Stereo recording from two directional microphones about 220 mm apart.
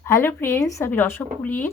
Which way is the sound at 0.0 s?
10° left (ahead or behind).